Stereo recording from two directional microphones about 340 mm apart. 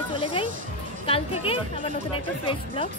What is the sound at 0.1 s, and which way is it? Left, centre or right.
Music, centre.